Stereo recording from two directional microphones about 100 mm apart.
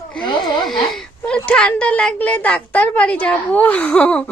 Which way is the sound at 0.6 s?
5° left (ahead or behind).